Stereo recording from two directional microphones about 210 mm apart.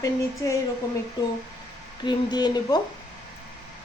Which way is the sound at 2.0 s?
20° left (ahead or behind).